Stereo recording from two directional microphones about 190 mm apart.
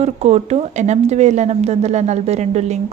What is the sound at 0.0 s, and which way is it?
Speech, 35° right (ahead or behind).